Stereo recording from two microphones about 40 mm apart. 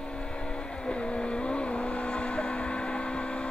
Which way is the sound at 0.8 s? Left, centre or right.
Left.